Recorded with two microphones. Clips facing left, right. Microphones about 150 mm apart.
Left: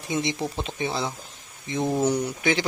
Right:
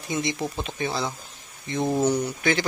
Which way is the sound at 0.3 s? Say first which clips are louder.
Even; centre (ahead or behind).